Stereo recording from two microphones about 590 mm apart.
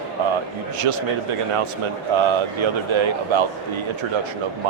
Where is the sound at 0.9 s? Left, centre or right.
Right.